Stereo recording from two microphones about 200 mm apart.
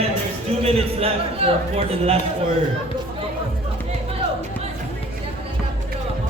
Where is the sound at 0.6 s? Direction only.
30° right (ahead or behind).